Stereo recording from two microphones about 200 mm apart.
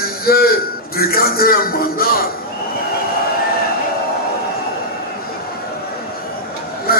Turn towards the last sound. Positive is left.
turn(degrees=50)  # may be behind; listen again after turning